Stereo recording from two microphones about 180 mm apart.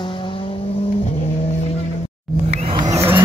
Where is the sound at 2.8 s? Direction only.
15° right (ahead or behind).